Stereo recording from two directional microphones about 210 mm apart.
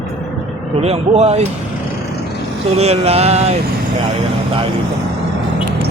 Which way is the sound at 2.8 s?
30° right (ahead or behind).